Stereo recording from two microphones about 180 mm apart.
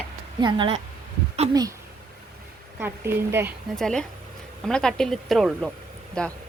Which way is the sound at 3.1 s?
10° right (ahead or behind).